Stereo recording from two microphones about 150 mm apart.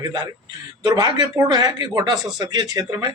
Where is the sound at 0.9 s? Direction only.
25° right (ahead or behind).